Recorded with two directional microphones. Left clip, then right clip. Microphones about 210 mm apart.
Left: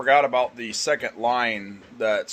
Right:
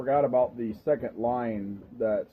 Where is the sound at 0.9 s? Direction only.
65° left (ahead or behind).